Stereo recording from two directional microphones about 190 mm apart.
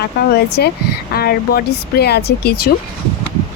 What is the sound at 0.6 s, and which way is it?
Speech, 55° left (ahead or behind).